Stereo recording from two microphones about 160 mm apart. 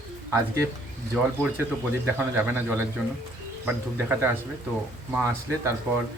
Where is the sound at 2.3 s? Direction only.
10° right (ahead or behind).